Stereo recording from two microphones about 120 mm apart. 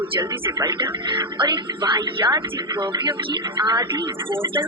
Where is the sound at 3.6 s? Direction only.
35° right (ahead or behind).